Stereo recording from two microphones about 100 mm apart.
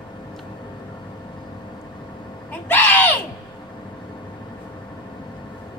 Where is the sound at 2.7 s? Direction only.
20° left (ahead or behind).